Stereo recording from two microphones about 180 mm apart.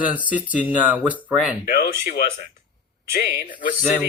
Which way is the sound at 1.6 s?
60° left (ahead or behind).